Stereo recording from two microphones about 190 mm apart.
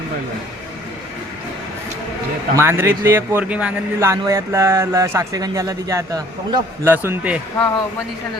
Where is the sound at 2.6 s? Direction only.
10° right (ahead or behind).